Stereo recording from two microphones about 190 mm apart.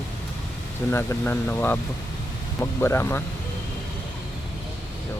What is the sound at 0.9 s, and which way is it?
Speech, 15° left (ahead or behind).